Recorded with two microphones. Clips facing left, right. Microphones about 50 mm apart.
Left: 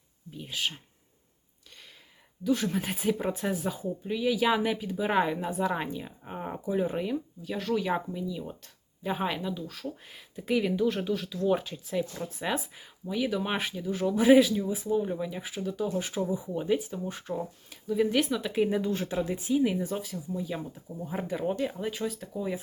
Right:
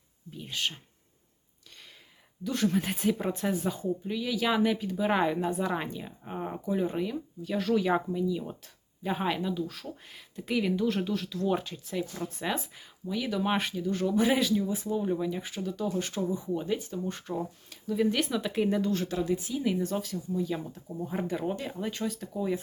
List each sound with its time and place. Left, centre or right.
0.3 s speech: centre
2.4 s speech: centre
7.4 s speech: centre; by 19.6 s left
19.6 s speech: centre